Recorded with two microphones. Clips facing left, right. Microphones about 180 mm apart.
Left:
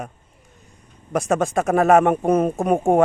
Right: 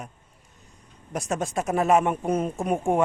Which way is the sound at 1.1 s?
55° left (ahead or behind).